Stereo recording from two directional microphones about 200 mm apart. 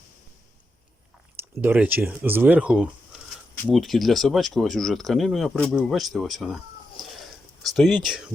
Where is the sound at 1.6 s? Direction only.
10° right (ahead or behind).